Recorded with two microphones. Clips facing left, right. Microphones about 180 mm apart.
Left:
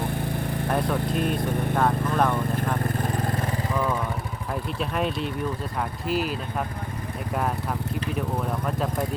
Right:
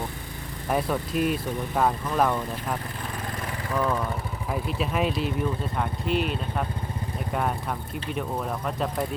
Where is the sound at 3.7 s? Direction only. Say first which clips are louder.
Right 3 dB; 5° left (ahead or behind).